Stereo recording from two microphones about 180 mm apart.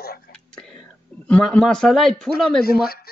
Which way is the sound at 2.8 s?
55° left (ahead or behind).